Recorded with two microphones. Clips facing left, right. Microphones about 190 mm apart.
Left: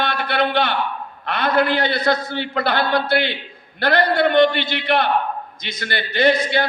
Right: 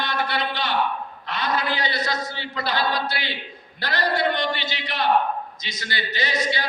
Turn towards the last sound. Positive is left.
turn(degrees=60)  # may be behind; listen again after turning